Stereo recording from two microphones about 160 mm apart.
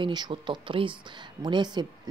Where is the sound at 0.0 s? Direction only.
30° right (ahead or behind).